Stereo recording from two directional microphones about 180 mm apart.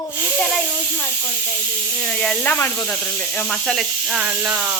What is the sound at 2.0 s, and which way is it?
Speech, 5° left (ahead or behind).